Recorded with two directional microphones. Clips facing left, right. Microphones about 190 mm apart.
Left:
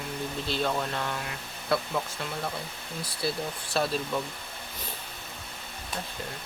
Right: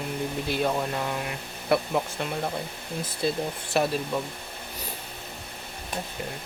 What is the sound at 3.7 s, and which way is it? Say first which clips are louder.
Speech: right 3 dB; 15° right (ahead or behind).